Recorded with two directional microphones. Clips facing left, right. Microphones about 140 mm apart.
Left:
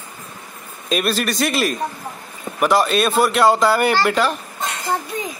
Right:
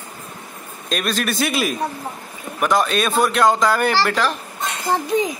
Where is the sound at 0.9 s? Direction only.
5° left (ahead or behind).